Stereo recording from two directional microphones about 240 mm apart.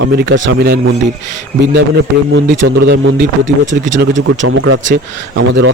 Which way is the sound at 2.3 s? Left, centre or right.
Right.